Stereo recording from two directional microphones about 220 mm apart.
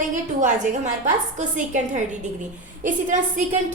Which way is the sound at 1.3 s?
35° right (ahead or behind).